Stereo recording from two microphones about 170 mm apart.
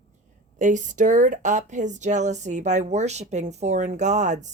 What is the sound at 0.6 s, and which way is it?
Speech, 50° right (ahead or behind).